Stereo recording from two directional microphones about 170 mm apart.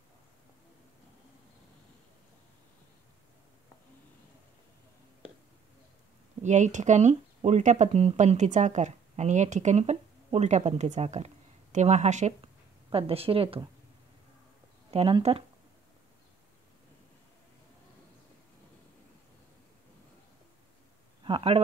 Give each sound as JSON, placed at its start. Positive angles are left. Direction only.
{"t": 6.4, "sound": "a woman's voice", "side_deg": -45}
{"t": 14.9, "sound": "a woman's voice", "side_deg": -35}
{"t": 21.2, "sound": "speech", "side_deg": -30}